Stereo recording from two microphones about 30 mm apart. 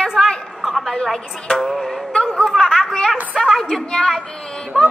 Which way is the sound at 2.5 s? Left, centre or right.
Centre.